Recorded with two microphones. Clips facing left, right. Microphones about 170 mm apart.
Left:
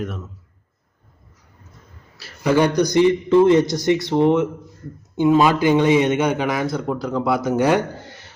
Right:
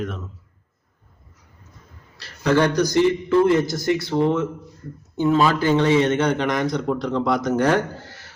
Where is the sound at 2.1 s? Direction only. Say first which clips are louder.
Left 1 dB; 10° left (ahead or behind).